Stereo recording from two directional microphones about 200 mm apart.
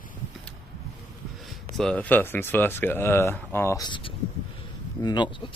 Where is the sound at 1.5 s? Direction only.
Centre (ahead or behind).